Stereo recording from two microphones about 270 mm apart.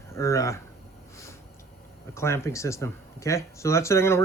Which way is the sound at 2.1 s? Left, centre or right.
Centre.